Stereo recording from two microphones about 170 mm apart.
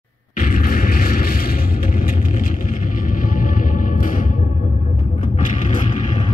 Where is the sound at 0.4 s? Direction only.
55° left (ahead or behind).